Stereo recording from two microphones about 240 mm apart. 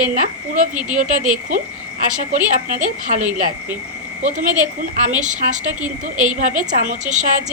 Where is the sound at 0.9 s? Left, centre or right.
Right.